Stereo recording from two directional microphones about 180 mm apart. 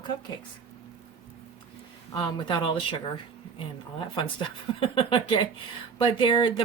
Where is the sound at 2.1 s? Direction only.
30° left (ahead or behind).